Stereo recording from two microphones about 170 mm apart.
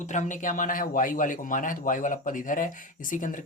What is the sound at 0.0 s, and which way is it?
A man's voice, 45° left (ahead or behind).